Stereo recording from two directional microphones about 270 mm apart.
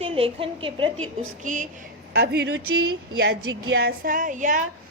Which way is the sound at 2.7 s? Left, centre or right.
Right.